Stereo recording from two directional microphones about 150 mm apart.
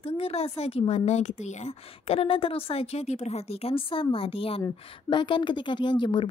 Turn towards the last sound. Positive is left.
turn(degrees=30)  # may be behind; listen again after turning